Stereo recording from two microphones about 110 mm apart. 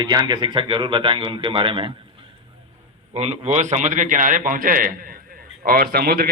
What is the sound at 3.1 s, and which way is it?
Speech, 70° right (ahead or behind).